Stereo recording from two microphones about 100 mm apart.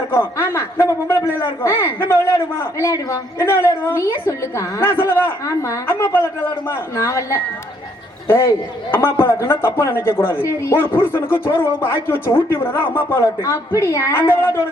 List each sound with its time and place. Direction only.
0.1 s a man's voice: 25° left (ahead or behind)